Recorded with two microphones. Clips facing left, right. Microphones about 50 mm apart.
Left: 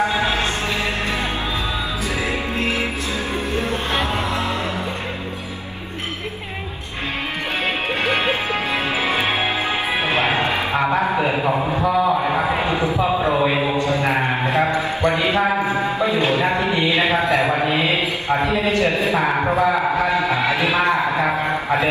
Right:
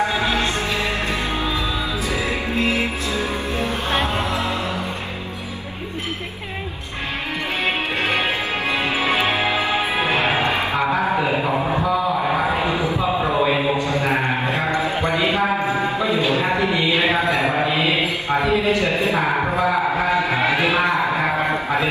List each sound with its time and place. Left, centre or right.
0.1 s music: left
2.5 s music: left
8.0 s music: left
9.9 s music: left
12.6 s basketball bounce: left
13.3 s a sound: left
15.0 s mantra: left
16.0 s music: left
17.6 s mantra: left
18.4 s a sound: left
20.2 s music: right